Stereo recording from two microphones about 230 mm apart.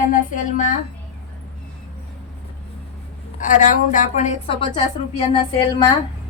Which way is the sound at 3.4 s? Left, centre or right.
Left.